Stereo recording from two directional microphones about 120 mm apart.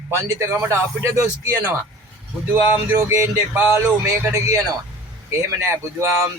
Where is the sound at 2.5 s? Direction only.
20° right (ahead or behind).